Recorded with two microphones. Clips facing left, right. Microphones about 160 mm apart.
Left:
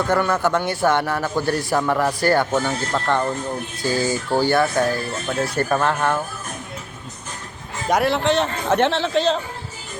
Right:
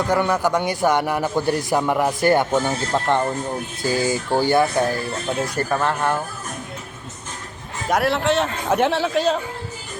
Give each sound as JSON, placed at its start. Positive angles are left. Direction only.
{"t": 0.1, "sound": "a man's voice", "side_deg": -10}
{"t": 5.8, "sound": "a man's voice", "side_deg": -15}
{"t": 7.9, "sound": "a man's voice", "side_deg": 0}